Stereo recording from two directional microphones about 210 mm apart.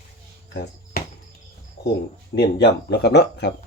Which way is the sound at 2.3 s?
50° left (ahead or behind).